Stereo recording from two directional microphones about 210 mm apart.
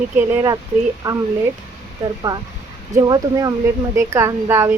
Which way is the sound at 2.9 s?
20° right (ahead or behind).